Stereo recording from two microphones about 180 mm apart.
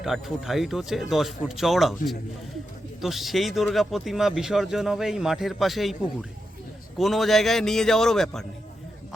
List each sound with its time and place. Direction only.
0.0 s speech: centre (ahead or behind)
7.0 s speech: centre (ahead or behind)